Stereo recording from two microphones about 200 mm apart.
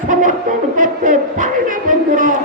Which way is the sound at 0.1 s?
40° right (ahead or behind).